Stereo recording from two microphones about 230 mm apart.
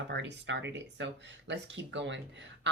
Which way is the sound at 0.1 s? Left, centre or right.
Right.